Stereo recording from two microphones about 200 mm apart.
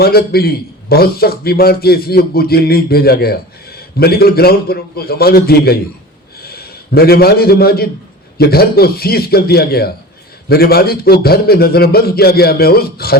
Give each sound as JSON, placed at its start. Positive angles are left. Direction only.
{"t": 0.0, "sound": "a man's voice", "side_deg": 50}